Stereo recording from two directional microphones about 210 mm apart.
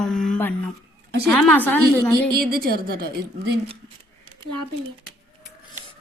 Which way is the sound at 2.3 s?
45° right (ahead or behind).